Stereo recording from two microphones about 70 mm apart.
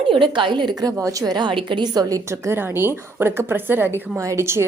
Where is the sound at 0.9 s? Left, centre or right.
Right.